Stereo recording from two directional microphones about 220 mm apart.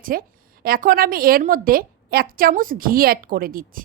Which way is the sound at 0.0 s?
40° right (ahead or behind).